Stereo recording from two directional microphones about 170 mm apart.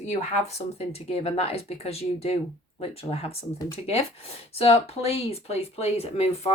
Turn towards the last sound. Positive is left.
turn(degrees=35)  # may be behind; listen again after turning